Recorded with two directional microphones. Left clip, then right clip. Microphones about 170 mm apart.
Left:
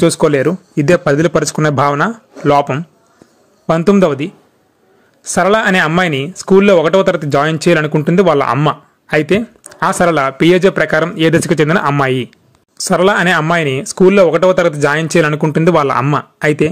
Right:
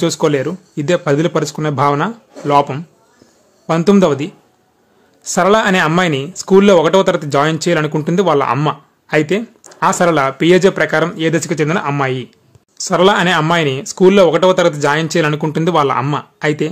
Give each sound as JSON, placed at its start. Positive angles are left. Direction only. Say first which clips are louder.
{"t": 0.0, "sound": "speech", "louder": "left 4 dB", "side_deg": 30}